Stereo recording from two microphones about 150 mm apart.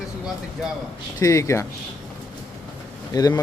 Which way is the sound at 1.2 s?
20° left (ahead or behind).